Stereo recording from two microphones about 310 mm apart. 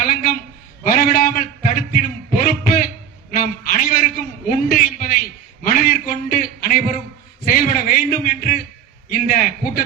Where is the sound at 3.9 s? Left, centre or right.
Left.